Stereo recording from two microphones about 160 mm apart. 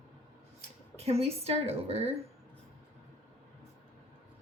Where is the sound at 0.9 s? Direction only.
40° right (ahead or behind).